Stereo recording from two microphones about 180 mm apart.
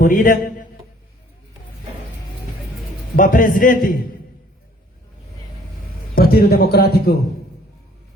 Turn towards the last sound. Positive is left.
turn(degrees=60)  # may be behind; listen again after turning